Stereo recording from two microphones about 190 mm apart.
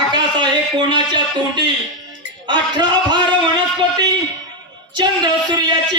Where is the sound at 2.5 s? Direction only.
25° right (ahead or behind).